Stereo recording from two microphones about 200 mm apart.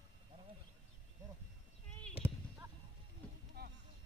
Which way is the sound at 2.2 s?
10° right (ahead or behind).